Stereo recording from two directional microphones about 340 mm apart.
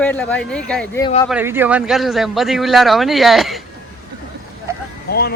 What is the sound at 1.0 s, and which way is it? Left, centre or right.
Speech, centre.